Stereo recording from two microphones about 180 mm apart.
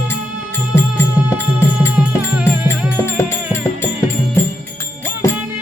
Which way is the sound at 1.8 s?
10° right (ahead or behind).